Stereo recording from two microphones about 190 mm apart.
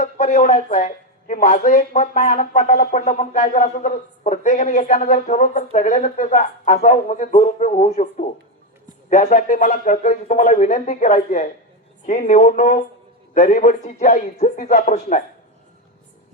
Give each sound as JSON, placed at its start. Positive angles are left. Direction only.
{"t": 0.0, "sound": "speech", "side_deg": 35}
{"t": 9.0, "sound": "speech", "side_deg": 40}